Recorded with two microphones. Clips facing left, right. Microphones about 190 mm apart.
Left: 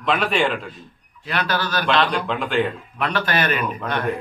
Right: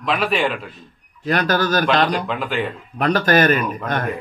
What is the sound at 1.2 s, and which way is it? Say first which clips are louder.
Speech: right 5 dB; 45° right (ahead or behind).